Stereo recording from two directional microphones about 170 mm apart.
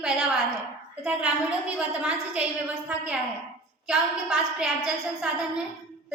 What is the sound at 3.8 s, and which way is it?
A woman's voice, 5° right (ahead or behind).